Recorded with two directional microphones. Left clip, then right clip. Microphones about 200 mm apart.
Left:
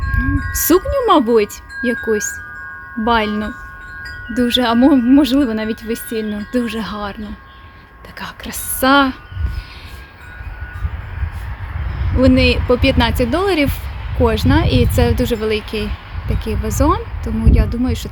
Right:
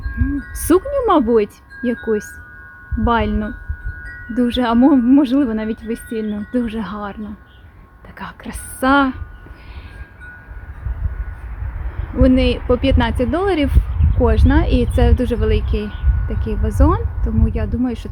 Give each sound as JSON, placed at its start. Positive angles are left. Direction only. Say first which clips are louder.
{"t": 0.2, "sound": "wind chime", "louder": "left 2 dB", "side_deg": -10}
{"t": 3.0, "sound": "speech", "louder": "left 2 dB", "side_deg": -5}
{"t": 8.2, "sound": "speech", "louder": "left 3 dB", "side_deg": -5}
{"t": 12.2, "sound": "speech", "louder": "left 2 dB", "side_deg": 0}